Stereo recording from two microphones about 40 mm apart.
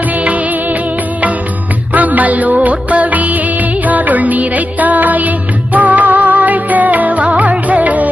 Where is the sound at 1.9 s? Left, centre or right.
Right.